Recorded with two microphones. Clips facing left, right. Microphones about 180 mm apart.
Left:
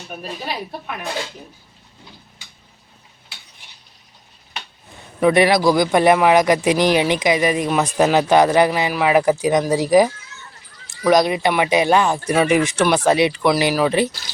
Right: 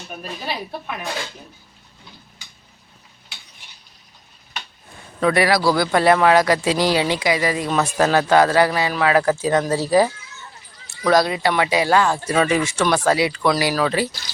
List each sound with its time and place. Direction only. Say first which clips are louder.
5.2 s speech: left 3 dB; 20° left (ahead or behind)